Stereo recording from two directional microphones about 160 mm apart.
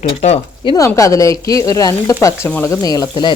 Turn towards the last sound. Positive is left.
turn(degrees=25)  # may be behind; listen again after turning